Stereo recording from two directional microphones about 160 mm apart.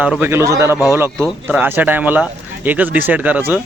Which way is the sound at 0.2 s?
15° right (ahead or behind).